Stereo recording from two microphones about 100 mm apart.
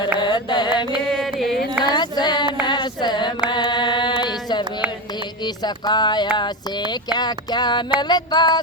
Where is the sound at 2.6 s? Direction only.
50° left (ahead or behind).